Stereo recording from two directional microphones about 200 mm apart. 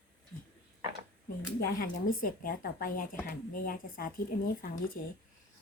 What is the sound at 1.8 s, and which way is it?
Speech, 45° left (ahead or behind).